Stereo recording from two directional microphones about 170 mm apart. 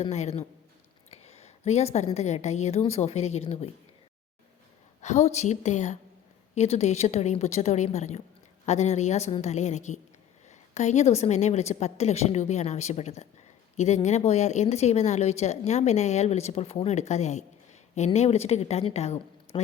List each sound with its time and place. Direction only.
0.0 s speech: 40° left (ahead or behind)
1.1 s a sound: 40° left (ahead or behind)
2.1 s speech: 40° left (ahead or behind)
5.0 s a woman's voice: 40° left (ahead or behind)
19.5 s speech: 30° left (ahead or behind)